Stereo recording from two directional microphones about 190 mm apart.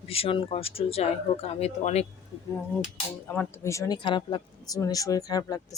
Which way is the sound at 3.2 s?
10° left (ahead or behind).